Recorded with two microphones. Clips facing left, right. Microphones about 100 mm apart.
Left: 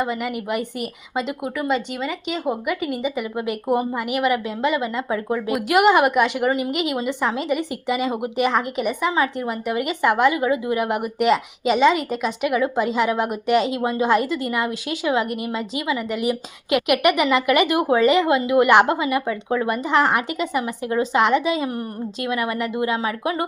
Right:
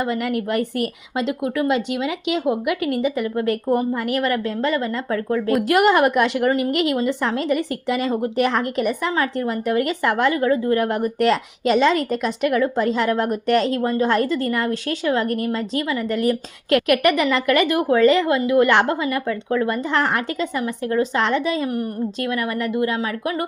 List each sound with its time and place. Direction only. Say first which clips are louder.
0.0 s a woman's voice: right 2 dB; 5° left (ahead or behind); by 23.5 s 20° left (ahead or behind)